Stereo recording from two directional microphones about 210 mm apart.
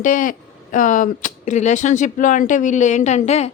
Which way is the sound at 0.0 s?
40° left (ahead or behind).